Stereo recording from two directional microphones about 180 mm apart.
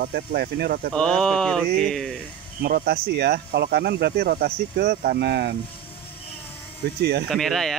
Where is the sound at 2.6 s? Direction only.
60° right (ahead or behind).